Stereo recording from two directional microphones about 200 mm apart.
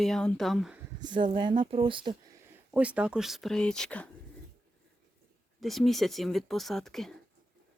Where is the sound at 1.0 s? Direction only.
20° right (ahead or behind).